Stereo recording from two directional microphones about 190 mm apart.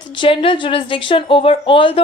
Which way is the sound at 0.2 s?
25° left (ahead or behind).